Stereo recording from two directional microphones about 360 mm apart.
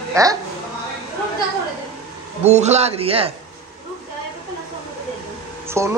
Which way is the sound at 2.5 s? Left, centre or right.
Centre.